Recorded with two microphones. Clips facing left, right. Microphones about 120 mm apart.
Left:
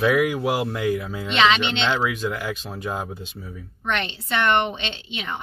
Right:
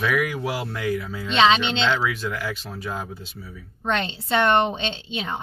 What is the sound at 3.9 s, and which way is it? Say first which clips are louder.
Speech: right 2 dB; 25° right (ahead or behind).